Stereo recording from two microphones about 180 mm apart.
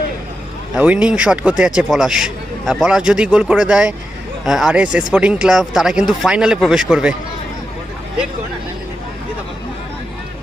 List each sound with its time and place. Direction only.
0.8 s a man's voice: 5° right (ahead or behind)